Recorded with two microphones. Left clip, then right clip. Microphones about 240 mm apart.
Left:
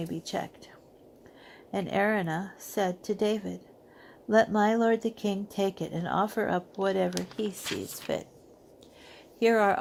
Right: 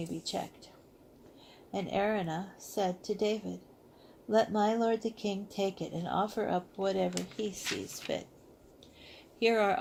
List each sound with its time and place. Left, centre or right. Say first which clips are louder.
0.0 s speech: left 3 dB; left
1.7 s speech: left 4 dB; left
9.4 s speech: left 4 dB; left